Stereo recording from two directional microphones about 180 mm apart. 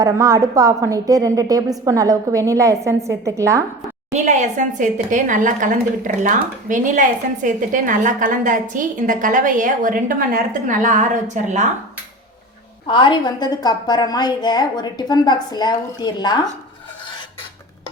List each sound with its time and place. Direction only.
0.0 s a woman's voice: 20° right (ahead or behind)
4.1 s a woman's voice: 40° right (ahead or behind)
12.9 s a woman's voice: 25° left (ahead or behind)